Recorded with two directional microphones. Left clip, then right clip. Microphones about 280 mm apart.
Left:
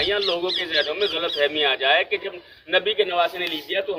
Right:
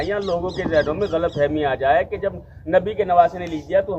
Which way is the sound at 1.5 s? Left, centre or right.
Centre.